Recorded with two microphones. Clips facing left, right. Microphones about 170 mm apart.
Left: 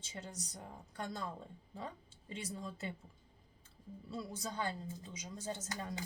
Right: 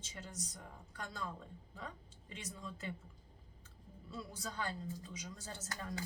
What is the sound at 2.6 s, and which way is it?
Speech, 30° left (ahead or behind).